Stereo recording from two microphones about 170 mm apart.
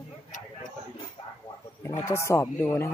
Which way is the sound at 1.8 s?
15° left (ahead or behind).